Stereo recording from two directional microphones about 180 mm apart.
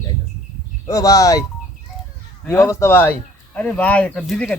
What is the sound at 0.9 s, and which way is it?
Speech, 20° left (ahead or behind).